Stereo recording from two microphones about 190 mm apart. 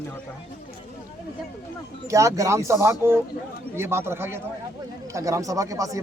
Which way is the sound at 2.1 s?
15° right (ahead or behind).